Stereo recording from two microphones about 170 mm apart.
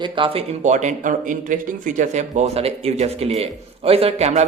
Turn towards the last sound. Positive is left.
turn(degrees=-40)  # may be behind; listen again after turning